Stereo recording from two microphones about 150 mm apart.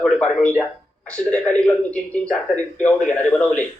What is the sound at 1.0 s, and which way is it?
A man's voice, 5° left (ahead or behind).